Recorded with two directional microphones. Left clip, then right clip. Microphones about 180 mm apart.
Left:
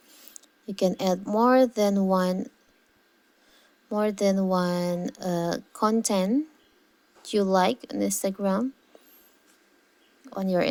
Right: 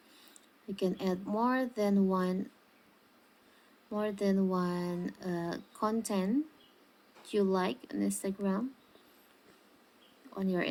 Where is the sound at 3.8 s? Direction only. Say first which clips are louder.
Left 9 dB; 40° left (ahead or behind).